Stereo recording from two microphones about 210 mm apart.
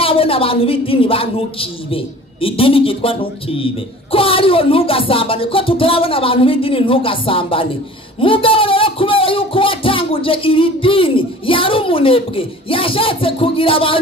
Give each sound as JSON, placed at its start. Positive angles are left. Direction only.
{"t": 0.0, "sound": "a woman's voice", "side_deg": 25}